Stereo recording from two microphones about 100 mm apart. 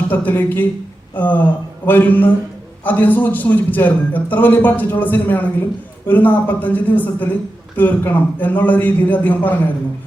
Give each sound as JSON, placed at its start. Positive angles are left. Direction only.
{"t": 0.1, "sound": "a man's voice", "side_deg": 20}